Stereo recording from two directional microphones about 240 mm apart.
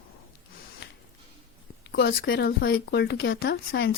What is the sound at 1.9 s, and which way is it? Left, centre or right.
Speech, left.